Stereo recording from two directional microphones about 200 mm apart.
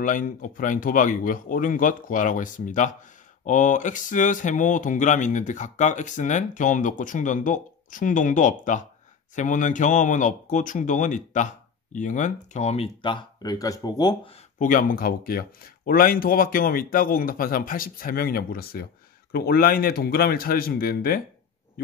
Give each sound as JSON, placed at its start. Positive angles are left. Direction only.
{"t": 0.0, "sound": "speech", "side_deg": 40}
{"t": 14.6, "sound": "speech", "side_deg": 45}